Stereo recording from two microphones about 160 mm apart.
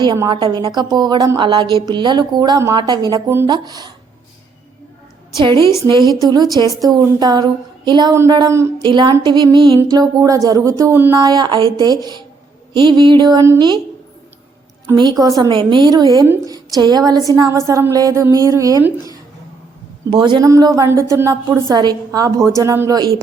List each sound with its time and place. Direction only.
0.2 s a woman's voice: 30° right (ahead or behind)
6.2 s a woman's voice: 25° right (ahead or behind)
8.1 s a woman's voice: 15° right (ahead or behind)
14.9 s a woman's voice: 25° right (ahead or behind)
20.1 s a woman's voice: 30° right (ahead or behind)